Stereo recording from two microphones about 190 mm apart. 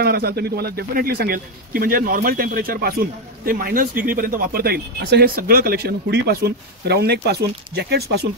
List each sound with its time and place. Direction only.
0.0 s speech: 55° right (ahead or behind)